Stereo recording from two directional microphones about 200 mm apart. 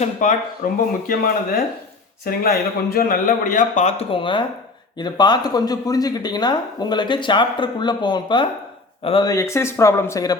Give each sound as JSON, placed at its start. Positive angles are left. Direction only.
{"t": 0.0, "sound": "a man's voice", "side_deg": 40}